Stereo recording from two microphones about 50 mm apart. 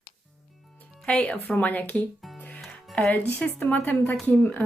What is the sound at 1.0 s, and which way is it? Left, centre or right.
Speech, left.